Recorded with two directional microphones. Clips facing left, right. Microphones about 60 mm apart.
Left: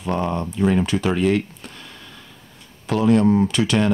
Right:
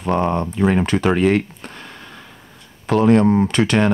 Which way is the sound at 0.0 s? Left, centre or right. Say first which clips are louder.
Right 4 dB; right.